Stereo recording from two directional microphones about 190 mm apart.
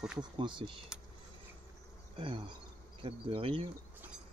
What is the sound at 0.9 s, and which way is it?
Keys jangling, 5° right (ahead or behind).